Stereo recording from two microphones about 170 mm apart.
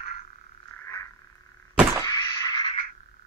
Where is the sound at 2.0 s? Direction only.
20° left (ahead or behind).